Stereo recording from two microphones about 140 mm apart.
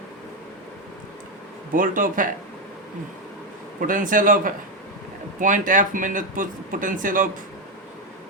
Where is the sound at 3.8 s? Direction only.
70° right (ahead or behind).